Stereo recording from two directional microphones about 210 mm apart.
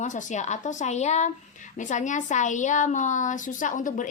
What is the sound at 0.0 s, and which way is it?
A woman's voice, 35° left (ahead or behind).